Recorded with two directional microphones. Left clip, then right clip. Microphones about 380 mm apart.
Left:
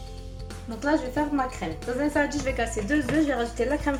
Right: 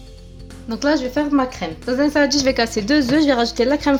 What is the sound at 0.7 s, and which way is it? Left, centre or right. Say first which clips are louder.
A woman's voice: right 7 dB; right.